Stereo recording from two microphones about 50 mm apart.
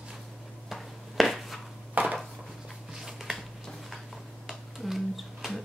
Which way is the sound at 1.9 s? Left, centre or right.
Right.